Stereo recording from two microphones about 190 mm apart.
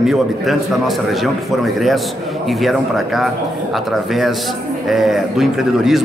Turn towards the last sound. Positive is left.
turn(degrees=0)  # may be behind; listen again after turning